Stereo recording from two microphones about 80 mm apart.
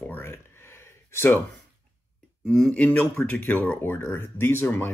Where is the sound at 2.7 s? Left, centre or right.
Centre.